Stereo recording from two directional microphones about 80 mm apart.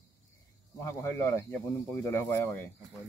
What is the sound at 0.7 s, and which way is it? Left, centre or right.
Speech, left.